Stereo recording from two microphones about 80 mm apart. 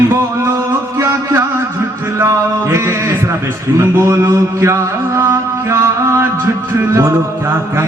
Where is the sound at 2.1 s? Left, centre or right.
Right.